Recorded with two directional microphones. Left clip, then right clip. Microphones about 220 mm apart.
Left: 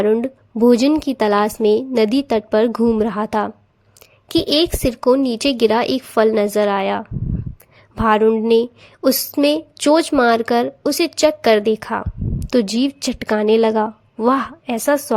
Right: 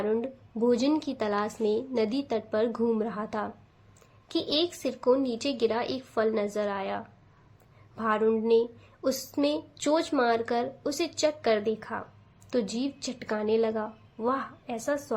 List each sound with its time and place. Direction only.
0.0 s speech: 40° left (ahead or behind)